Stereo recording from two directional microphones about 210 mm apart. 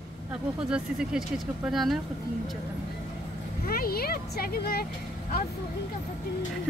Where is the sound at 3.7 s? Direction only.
45° left (ahead or behind).